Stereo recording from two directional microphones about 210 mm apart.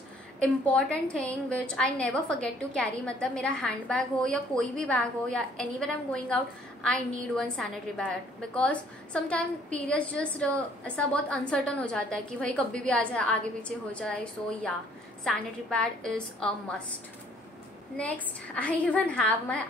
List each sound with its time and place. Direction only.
0.4 s a woman's voice: 5° left (ahead or behind)
17.9 s a woman's voice: 5° left (ahead or behind)